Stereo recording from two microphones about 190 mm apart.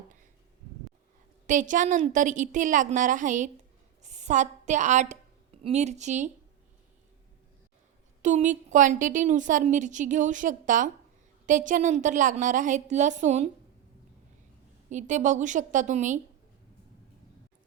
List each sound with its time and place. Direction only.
1.5 s a woman's voice: 40° right (ahead or behind)
8.2 s a woman's voice: 40° right (ahead or behind)
14.8 s a woman's voice: 40° right (ahead or behind)